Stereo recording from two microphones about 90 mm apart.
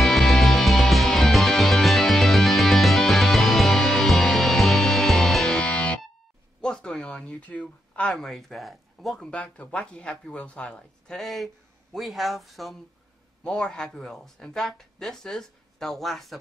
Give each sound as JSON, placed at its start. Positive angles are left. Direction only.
{"t": 0.0, "sound": "music", "side_deg": 0}
{"t": 6.6, "sound": "a sound", "side_deg": 5}
{"t": 7.9, "sound": "speech", "side_deg": 10}
{"t": 9.3, "sound": "speech", "side_deg": 15}